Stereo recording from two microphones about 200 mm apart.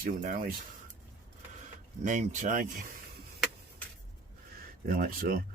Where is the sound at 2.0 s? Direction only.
40° right (ahead or behind).